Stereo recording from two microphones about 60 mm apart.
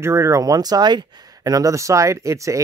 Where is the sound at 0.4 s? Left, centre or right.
Right.